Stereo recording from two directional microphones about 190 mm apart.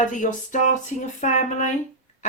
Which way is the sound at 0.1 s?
40° left (ahead or behind).